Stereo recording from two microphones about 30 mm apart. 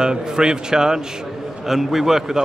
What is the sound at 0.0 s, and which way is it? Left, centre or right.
Speech, right.